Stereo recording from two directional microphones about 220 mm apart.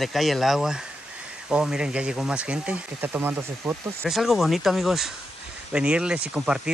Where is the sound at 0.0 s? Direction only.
Centre (ahead or behind).